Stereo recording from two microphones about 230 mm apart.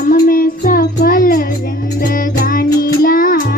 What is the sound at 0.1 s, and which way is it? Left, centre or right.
Music, left.